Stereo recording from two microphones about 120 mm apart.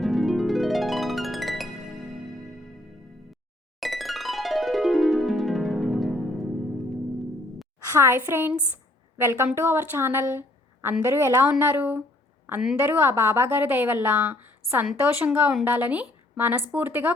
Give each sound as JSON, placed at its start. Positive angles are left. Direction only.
{"t": 0.0, "sound": "harp", "side_deg": 0}
{"t": 3.8, "sound": "music", "side_deg": 0}
{"t": 7.9, "sound": "a woman's voice", "side_deg": -20}